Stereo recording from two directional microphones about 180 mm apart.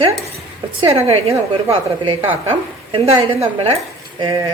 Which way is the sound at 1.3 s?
15° right (ahead or behind).